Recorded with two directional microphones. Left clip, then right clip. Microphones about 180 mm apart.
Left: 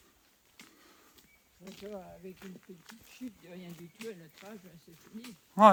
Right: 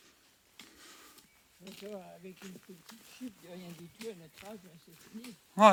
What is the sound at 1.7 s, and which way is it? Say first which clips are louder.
Speech: left 1 dB; 50° right (ahead or behind).